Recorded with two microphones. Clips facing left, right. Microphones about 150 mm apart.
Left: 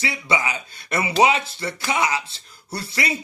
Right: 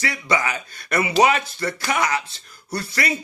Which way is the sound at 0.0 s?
25° left (ahead or behind).